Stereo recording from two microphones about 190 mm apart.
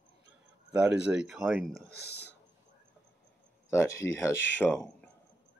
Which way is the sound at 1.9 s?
60° left (ahead or behind).